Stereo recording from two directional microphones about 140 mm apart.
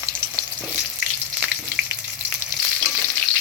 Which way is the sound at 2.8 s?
20° right (ahead or behind).